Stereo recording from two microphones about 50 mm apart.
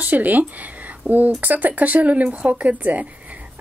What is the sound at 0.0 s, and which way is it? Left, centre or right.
A woman's voice, right.